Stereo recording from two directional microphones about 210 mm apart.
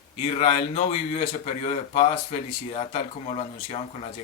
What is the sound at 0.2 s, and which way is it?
Speech, 30° left (ahead or behind).